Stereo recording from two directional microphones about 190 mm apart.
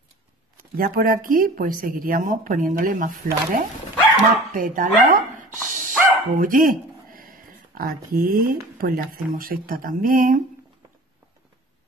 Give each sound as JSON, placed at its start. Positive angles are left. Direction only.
{"t": 0.7, "sound": "speech", "side_deg": -50}
{"t": 4.5, "sound": "dog", "side_deg": -45}
{"t": 8.8, "sound": "speech", "side_deg": -50}